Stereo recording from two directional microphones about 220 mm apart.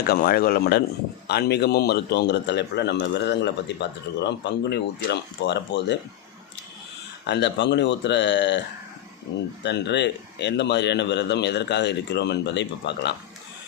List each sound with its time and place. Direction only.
0.1 s a man's voice: 40° left (ahead or behind)
7.3 s a man's voice: 50° left (ahead or behind)
9.6 s a man's voice: 50° left (ahead or behind)